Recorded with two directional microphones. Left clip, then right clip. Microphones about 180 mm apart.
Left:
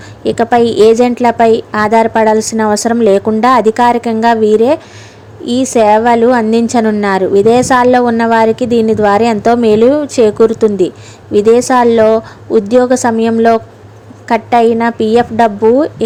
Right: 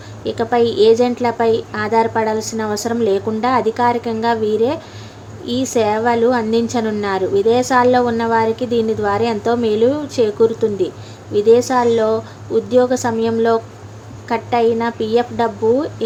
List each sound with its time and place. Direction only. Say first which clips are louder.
0.3 s a woman's voice: left 6 dB; 45° left (ahead or behind)